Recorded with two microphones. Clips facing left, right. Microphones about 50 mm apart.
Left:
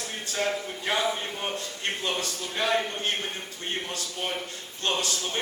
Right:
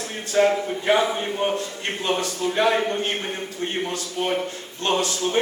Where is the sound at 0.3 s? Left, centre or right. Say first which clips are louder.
Right 10 dB; right.